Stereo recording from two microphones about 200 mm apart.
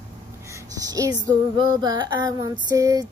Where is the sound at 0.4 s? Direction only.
15° right (ahead or behind).